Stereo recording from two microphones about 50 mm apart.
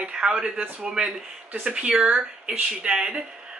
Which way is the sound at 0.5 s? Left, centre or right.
Right.